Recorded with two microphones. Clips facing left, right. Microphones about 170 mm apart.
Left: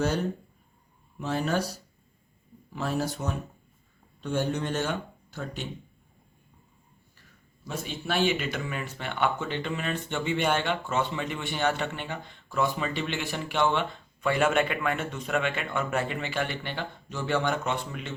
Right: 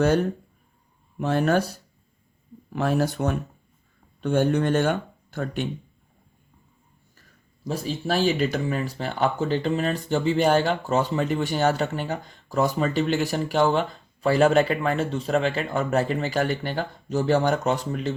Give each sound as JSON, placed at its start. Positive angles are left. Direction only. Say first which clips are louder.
{"t": 1.2, "sound": "speech", "louder": "right 6 dB", "side_deg": -60}
{"t": 7.7, "sound": "speech", "louder": "right 6 dB", "side_deg": -35}